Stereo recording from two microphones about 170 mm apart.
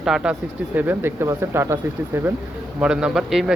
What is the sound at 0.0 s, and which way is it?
A man's voice, 5° right (ahead or behind).